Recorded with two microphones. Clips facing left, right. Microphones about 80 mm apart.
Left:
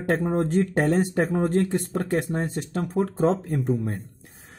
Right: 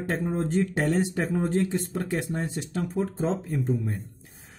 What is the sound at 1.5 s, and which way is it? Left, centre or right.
Speech, left.